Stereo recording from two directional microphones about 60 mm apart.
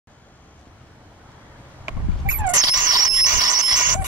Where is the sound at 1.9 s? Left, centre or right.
Right.